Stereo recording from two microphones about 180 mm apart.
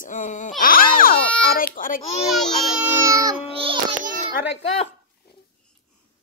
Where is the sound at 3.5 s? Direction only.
30° right (ahead or behind).